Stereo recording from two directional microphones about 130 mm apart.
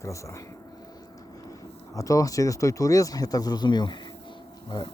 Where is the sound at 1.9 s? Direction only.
25° left (ahead or behind).